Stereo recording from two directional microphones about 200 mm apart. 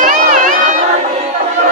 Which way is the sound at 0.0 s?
40° right (ahead or behind).